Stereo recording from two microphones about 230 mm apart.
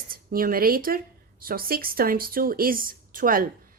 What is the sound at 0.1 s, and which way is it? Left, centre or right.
Speech, right.